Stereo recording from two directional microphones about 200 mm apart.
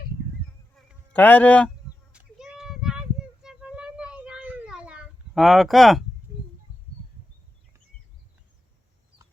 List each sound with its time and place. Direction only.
1.1 s a man's voice: 10° left (ahead or behind)
2.1 s a sound: centre (ahead or behind)
6.3 s bird: 15° right (ahead or behind)